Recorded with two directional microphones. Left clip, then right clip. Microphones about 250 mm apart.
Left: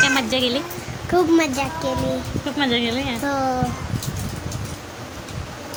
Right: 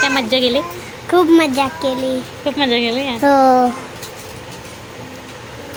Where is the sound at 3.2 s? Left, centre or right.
Centre.